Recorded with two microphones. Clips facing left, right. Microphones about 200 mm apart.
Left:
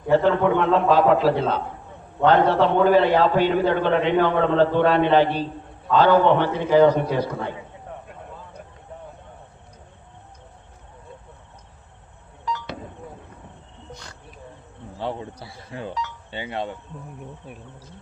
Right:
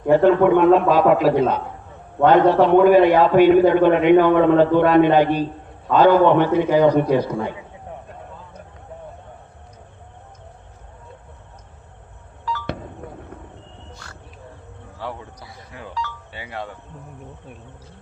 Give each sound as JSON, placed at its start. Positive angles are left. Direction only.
{"t": 0.3, "sound": "a man's voice", "side_deg": -15}
{"t": 13.9, "sound": "a sound", "side_deg": 20}
{"t": 14.9, "sound": "speech", "side_deg": 25}